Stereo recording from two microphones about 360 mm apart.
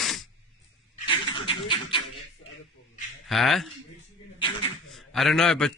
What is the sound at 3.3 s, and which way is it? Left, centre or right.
Speech, centre.